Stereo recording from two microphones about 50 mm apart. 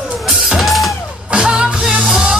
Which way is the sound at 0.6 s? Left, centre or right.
Centre.